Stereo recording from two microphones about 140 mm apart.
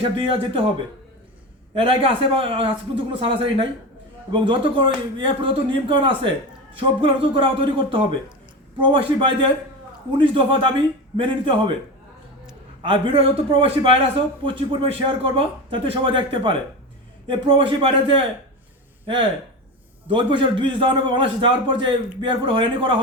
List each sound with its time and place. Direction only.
0.2 s a man's voice: 40° right (ahead or behind)
1.7 s a man's voice: 40° right (ahead or behind)
12.8 s a man's voice: 40° right (ahead or behind)
20.1 s a man's voice: 35° right (ahead or behind)